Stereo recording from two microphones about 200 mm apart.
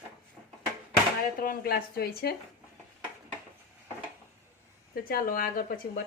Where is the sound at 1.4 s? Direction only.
50° left (ahead or behind).